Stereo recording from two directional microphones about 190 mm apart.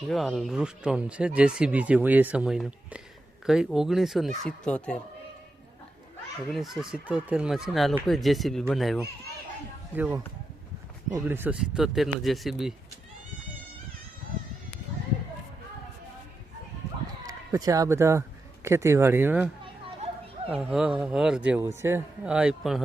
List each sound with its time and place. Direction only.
0.1 s speech: centre (ahead or behind)
6.5 s speech: centre (ahead or behind)
11.3 s speech: 10° right (ahead or behind)
17.2 s a man's voice: 20° right (ahead or behind)
20.4 s speech: 30° right (ahead or behind)
20.7 s speech: 5° right (ahead or behind)